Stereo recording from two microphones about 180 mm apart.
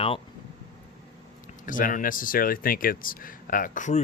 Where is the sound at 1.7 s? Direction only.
50° left (ahead or behind).